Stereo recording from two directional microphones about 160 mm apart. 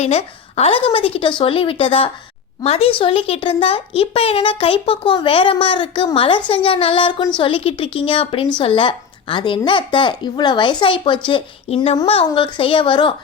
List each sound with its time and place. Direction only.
0.0 s a woman's voice: 40° left (ahead or behind)